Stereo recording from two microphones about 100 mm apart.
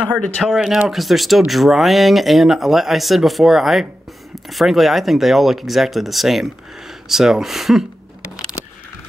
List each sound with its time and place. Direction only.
0.4 s speech: 5° right (ahead or behind)